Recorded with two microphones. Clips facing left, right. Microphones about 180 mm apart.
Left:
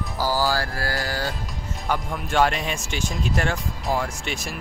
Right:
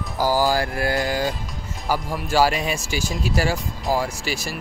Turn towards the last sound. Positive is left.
turn(degrees=-5)  # may be behind; listen again after turning